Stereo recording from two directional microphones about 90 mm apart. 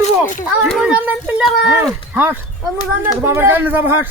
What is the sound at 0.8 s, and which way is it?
Speech, 15° right (ahead or behind).